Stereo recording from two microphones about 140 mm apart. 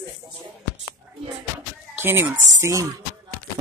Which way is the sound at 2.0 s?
15° right (ahead or behind).